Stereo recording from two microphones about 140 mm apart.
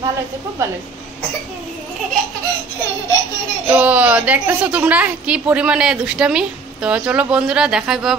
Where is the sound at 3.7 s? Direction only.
10° right (ahead or behind).